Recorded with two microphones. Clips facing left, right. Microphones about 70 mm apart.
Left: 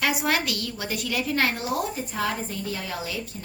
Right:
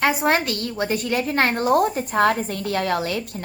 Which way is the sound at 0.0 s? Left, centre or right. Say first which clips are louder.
Right 5 dB; right.